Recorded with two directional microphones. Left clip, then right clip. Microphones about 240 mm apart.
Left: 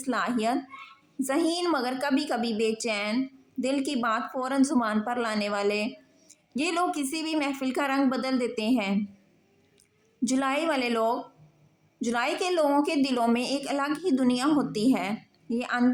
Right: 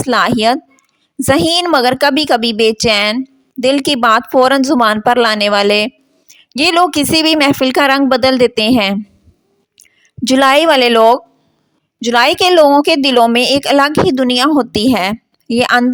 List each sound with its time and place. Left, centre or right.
0.0 s a woman's voice: right
10.2 s a woman's voice: right